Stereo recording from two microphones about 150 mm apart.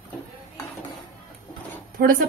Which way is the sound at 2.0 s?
70° right (ahead or behind).